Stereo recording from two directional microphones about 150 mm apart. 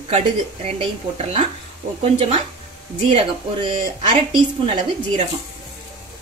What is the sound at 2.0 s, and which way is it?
Speech, 40° right (ahead or behind).